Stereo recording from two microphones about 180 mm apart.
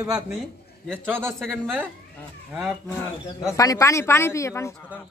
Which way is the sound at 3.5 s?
20° left (ahead or behind).